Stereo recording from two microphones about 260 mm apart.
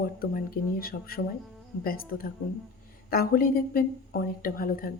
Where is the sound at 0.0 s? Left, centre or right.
Left.